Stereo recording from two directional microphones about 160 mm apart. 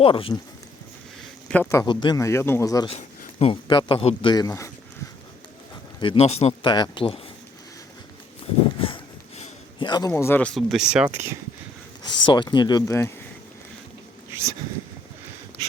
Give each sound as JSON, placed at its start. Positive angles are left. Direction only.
{"t": 0.0, "sound": "a man's voice", "side_deg": 35}
{"t": 1.5, "sound": "a man's voice", "side_deg": 10}
{"t": 1.8, "sound": "speech", "side_deg": 30}
{"t": 2.9, "sound": "speech", "side_deg": 40}
{"t": 6.0, "sound": "a man's voice", "side_deg": 35}
{"t": 6.7, "sound": "speech", "side_deg": 30}
{"t": 9.7, "sound": "a sound", "side_deg": 25}
{"t": 10.1, "sound": "speech", "side_deg": 15}
{"t": 12.0, "sound": "speech", "side_deg": 30}